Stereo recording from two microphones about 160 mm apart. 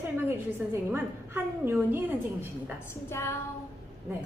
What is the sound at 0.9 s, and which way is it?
Speech, 15° right (ahead or behind).